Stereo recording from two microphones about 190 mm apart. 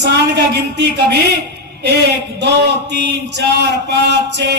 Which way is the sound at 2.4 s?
65° right (ahead or behind).